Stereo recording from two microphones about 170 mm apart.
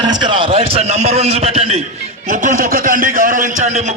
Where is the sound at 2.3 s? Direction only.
50° right (ahead or behind).